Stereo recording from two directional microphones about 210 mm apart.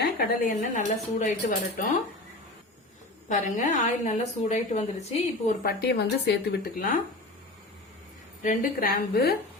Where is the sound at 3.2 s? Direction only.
35° left (ahead or behind).